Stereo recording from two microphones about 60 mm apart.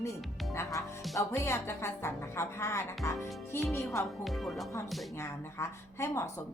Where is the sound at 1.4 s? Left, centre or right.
Left.